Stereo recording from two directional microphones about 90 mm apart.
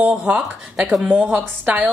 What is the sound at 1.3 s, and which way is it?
Speech, 15° right (ahead or behind).